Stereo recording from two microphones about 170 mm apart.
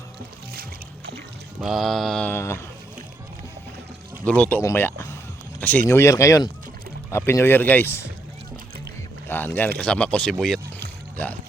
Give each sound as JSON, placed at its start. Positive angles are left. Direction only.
{"t": 1.6, "sound": "mantra", "side_deg": 0}
{"t": 4.3, "sound": "speech", "side_deg": 10}
{"t": 5.5, "sound": "a sound", "side_deg": 10}
{"t": 5.9, "sound": "speech", "side_deg": 15}
{"t": 9.3, "sound": "speech", "side_deg": 10}
{"t": 9.7, "sound": "mantra", "side_deg": 5}